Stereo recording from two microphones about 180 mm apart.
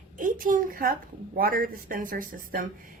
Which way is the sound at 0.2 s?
50° right (ahead or behind).